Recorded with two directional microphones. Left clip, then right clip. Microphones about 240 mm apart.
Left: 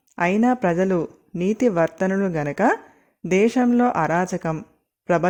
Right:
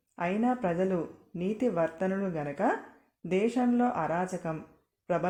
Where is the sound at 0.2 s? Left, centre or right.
Left.